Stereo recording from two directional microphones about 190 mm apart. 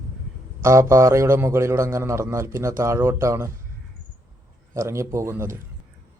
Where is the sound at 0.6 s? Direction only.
15° right (ahead or behind).